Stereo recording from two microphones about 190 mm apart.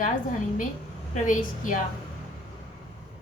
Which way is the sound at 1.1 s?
45° left (ahead or behind).